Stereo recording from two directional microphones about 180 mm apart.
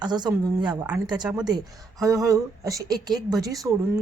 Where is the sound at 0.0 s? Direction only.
25° right (ahead or behind).